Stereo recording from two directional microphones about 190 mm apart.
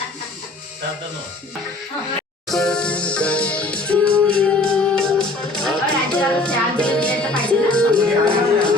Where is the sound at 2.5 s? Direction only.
5° left (ahead or behind).